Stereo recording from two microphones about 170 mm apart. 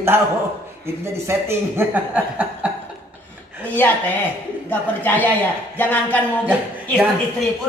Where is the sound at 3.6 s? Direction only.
10° left (ahead or behind).